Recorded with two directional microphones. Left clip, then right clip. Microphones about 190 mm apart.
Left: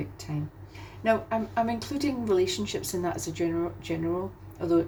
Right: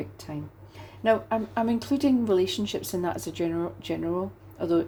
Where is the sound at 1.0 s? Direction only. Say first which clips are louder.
Right 2 dB; 35° right (ahead or behind).